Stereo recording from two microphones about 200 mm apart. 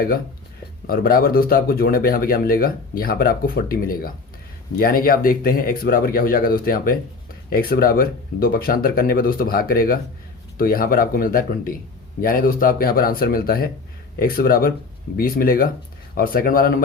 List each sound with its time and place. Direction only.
0.9 s speech: 45° left (ahead or behind)